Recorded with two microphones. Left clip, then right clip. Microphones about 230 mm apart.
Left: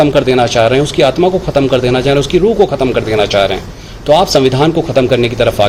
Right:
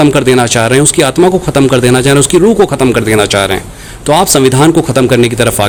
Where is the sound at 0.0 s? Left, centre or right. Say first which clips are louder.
Right 2 dB; right.